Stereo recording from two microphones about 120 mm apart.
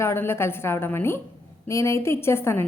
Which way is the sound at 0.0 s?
20° left (ahead or behind).